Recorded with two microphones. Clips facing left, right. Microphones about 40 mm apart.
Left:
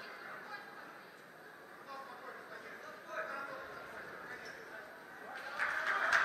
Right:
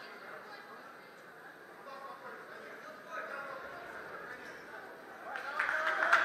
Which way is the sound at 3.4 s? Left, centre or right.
Centre.